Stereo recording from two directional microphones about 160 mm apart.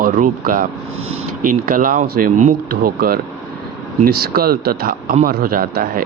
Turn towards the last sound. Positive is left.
turn(degrees=-65)  # may be behind; listen again after turning